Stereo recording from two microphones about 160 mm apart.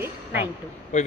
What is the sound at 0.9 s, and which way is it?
Speech, 45° left (ahead or behind).